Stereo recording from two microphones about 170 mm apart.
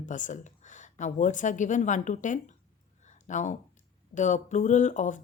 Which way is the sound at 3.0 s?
45° left (ahead or behind).